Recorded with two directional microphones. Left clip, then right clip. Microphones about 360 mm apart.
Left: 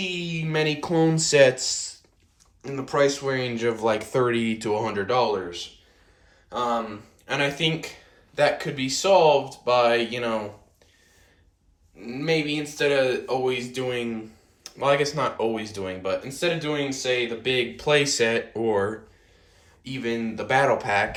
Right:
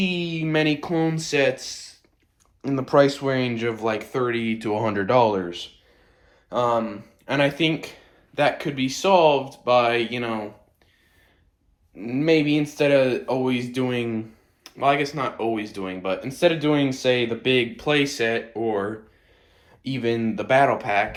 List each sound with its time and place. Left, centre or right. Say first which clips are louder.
0.0 s speech: right 3 dB; centre
2.6 s speech: right 4 dB; centre
12.0 s speech: right 5 dB; centre